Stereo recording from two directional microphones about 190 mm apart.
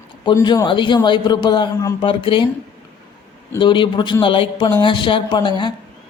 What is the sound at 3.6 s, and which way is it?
Speech, 25° left (ahead or behind).